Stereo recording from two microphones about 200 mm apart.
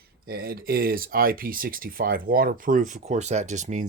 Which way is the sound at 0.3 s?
50° right (ahead or behind).